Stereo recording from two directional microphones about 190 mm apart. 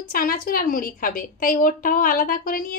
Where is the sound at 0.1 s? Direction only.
50° left (ahead or behind).